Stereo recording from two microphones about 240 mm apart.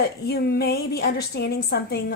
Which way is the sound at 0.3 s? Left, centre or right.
Left.